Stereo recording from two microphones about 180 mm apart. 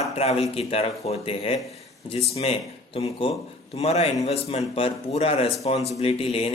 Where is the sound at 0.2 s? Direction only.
35° left (ahead or behind).